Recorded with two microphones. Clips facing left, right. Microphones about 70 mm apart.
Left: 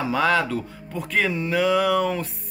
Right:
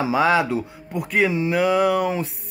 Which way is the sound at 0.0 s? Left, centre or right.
Centre.